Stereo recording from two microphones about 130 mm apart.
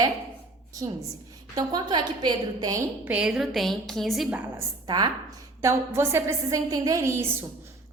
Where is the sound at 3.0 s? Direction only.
10° right (ahead or behind).